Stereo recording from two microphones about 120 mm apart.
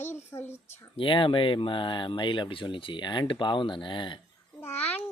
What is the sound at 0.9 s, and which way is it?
Speech, 45° left (ahead or behind).